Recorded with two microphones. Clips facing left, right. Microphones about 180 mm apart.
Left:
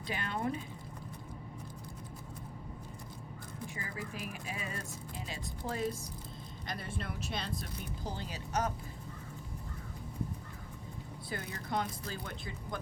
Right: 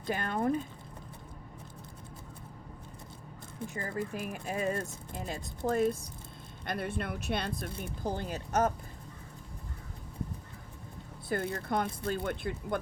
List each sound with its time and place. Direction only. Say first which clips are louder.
0.0 s speech: right 5 dB; 45° right (ahead or behind)
3.8 s speech: right 9 dB; 50° right (ahead or behind)
11.3 s speech: right 7 dB; 50° right (ahead or behind)